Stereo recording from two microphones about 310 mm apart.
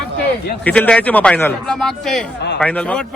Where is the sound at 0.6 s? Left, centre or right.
Centre.